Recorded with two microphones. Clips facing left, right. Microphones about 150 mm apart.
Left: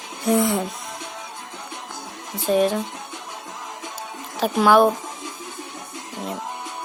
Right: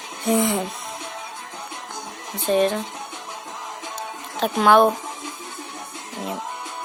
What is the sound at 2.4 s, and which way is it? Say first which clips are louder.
Speech: even; 5° left (ahead or behind).